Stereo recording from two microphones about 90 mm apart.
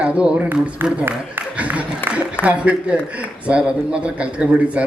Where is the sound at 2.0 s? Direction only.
20° left (ahead or behind).